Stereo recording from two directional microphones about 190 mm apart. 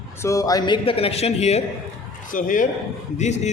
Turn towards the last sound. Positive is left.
turn(degrees=35)  # may be behind; listen again after turning